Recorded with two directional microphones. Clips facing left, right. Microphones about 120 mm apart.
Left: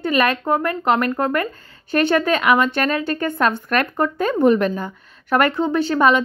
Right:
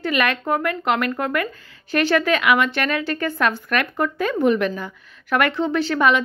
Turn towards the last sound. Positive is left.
turn(degrees=30)  # may be behind; listen again after turning